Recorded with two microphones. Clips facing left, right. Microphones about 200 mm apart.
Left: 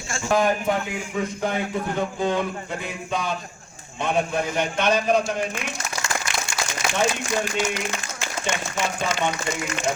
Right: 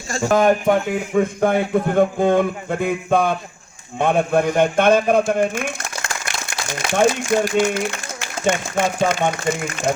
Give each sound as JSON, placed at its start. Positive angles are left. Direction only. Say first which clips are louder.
{"t": 0.1, "sound": "a man's voice", "louder": "right 6 dB", "side_deg": -45}